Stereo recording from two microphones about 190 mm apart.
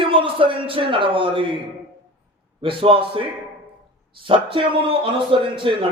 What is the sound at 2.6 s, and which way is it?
A man's voice, 30° right (ahead or behind).